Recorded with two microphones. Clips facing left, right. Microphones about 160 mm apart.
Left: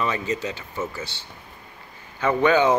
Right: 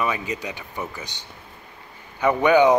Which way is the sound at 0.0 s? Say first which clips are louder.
Left 1 dB; 10° right (ahead or behind).